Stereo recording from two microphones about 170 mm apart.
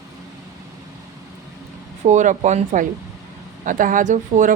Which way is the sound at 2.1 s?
45° right (ahead or behind).